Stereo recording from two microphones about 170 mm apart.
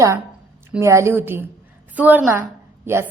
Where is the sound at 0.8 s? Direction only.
15° right (ahead or behind).